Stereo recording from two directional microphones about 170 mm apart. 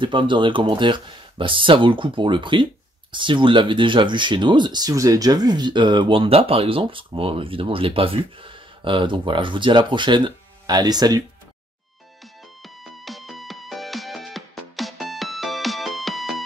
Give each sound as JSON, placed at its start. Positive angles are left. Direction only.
{"t": 0.0, "sound": "speech", "side_deg": -30}
{"t": 12.6, "sound": "music", "side_deg": 0}